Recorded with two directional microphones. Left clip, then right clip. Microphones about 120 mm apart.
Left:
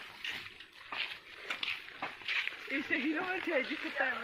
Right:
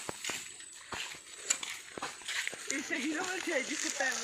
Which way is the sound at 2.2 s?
60° right (ahead or behind).